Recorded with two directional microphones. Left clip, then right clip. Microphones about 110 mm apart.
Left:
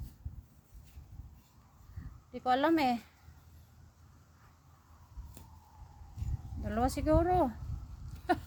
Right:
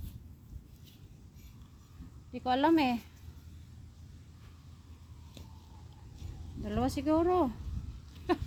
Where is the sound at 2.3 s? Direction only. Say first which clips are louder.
Right 1 dB; 65° left (ahead or behind).